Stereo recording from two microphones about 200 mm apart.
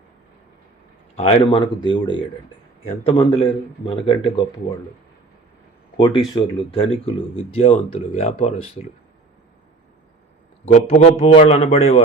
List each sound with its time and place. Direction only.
1.1 s a man's voice: 30° left (ahead or behind)
6.0 s a man's voice: 25° left (ahead or behind)
10.7 s a man's voice: 35° left (ahead or behind)